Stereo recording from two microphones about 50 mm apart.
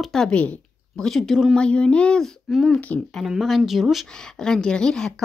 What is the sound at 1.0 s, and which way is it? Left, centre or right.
Speech, centre.